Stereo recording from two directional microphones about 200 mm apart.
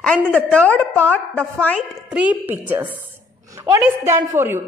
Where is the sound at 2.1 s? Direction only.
10° right (ahead or behind).